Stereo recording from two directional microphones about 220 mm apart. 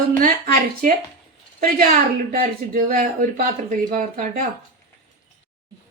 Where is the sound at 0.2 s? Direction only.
40° right (ahead or behind).